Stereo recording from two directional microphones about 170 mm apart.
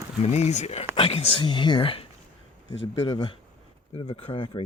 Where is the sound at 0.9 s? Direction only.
30° left (ahead or behind).